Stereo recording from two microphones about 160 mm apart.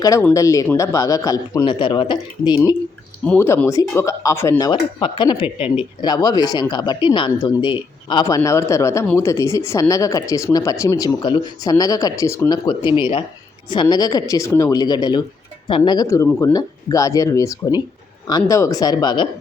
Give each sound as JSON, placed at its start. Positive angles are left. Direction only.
{"t": 0.0, "sound": "speech", "side_deg": 20}
{"t": 3.2, "sound": "speech", "side_deg": 15}
{"t": 13.0, "sound": "speech", "side_deg": 30}